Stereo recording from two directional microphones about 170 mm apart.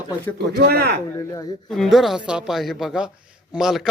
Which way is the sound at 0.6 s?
70° right (ahead or behind).